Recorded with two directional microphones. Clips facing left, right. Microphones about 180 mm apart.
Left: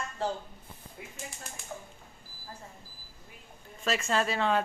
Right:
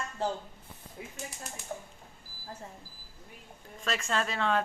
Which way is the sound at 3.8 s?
5° left (ahead or behind).